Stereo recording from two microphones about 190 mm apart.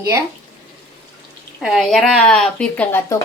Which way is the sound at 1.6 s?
Centre (ahead or behind).